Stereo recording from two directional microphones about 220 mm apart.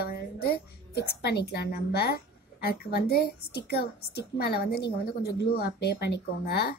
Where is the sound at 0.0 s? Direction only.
45° left (ahead or behind).